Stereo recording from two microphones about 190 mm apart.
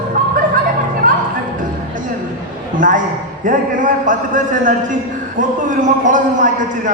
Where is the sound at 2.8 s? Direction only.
45° right (ahead or behind).